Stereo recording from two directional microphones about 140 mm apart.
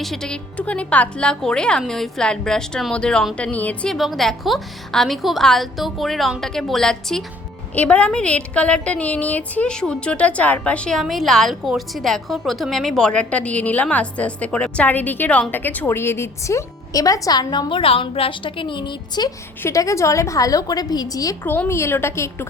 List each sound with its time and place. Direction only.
0.0 s a woman's voice: 5° left (ahead or behind)
3.9 s a woman's voice: centre (ahead or behind); by 21.3 s 25° left (ahead or behind)
21.4 s a woman's voice: 15° left (ahead or behind)